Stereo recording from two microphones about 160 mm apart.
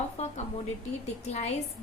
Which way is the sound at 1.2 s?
40° left (ahead or behind).